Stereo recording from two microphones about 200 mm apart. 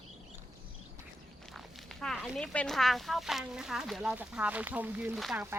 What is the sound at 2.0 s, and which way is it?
A woman's voice, centre (ahead or behind).